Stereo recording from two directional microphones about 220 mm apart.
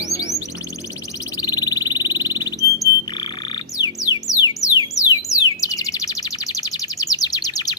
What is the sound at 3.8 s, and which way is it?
Music, 15° left (ahead or behind).